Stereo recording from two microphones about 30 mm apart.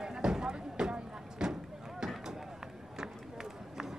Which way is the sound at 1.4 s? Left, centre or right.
Right.